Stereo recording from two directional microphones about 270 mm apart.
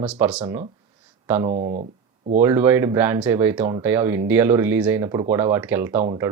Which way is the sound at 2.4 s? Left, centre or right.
Centre.